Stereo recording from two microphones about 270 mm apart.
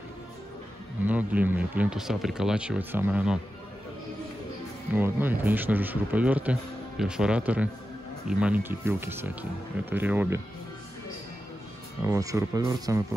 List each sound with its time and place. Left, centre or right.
1.0 s speech: centre
4.9 s speech: centre
12.1 s speech: centre